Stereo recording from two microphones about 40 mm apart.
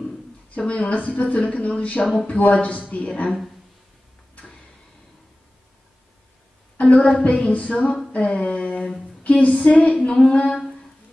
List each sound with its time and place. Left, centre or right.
0.6 s female singing: left
2.1 s speech: left
2.4 s female singing: left
3.1 s speech: left
6.9 s female singing: left
8.5 s a sound: left
9.2 s female singing: left